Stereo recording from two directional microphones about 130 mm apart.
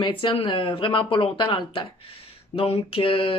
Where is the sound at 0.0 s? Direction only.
40° left (ahead or behind).